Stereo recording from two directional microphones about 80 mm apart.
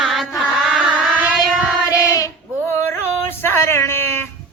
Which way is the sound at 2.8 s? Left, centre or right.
Left.